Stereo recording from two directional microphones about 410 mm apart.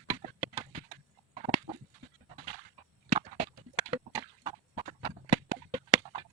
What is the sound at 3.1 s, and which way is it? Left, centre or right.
Horse, centre.